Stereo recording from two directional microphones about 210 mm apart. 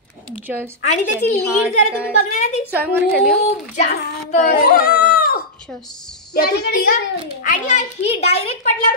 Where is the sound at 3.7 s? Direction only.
35° left (ahead or behind).